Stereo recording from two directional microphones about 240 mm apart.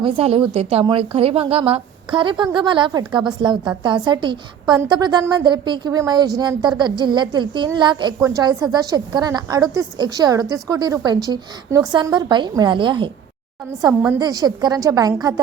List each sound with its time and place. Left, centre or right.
0.0 s a woman's voice: right
14.2 s a woman's voice: centre